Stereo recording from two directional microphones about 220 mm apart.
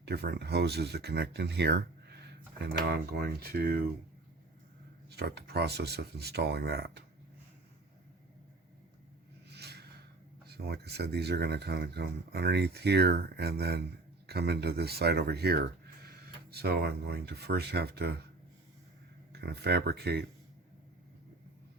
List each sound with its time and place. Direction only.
0.0 s speech: 45° right (ahead or behind)
5.0 s speech: 50° right (ahead or behind)
9.5 s a sound: 50° right (ahead or behind)
10.4 s speech: 45° right (ahead or behind)
19.3 s speech: 45° right (ahead or behind)